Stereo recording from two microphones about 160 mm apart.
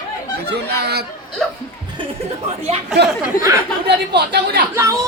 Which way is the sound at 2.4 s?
40° right (ahead or behind).